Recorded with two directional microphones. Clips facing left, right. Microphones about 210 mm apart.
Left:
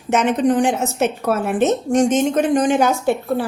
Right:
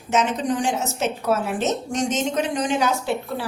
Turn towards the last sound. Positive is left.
turn(degrees=50)  # may be behind; listen again after turning